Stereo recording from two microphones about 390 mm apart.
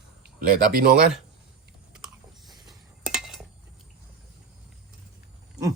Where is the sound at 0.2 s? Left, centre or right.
Right.